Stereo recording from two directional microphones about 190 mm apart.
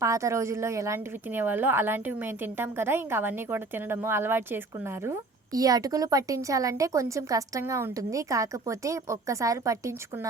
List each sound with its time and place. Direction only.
0.0 s a woman's voice: 15° right (ahead or behind)